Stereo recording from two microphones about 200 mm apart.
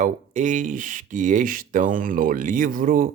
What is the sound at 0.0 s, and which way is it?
Speech, 40° right (ahead or behind).